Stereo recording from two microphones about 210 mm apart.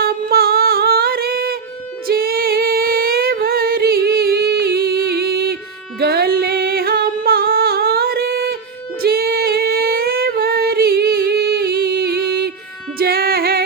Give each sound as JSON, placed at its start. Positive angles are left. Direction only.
{"t": 0.0, "sound": "music", "side_deg": -45}
{"t": 2.0, "sound": "female singing", "side_deg": -45}
{"t": 6.0, "sound": "music", "side_deg": -50}
{"t": 9.0, "sound": "female singing", "side_deg": -45}
{"t": 13.0, "sound": "music", "side_deg": -45}